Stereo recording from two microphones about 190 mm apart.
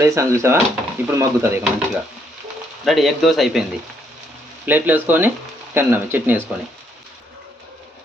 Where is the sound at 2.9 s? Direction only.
Centre (ahead or behind).